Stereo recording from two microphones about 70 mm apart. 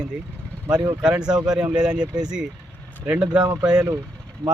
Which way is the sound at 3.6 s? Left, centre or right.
Centre.